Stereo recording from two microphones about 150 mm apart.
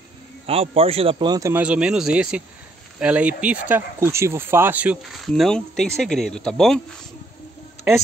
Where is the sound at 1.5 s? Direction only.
5° right (ahead or behind).